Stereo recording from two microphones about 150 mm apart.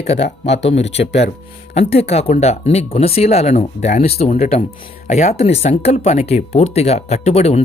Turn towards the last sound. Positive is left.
turn(degrees=45)  # may be behind; listen again after turning